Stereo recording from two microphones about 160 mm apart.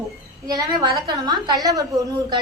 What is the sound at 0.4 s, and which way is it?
A woman's voice, 25° right (ahead or behind).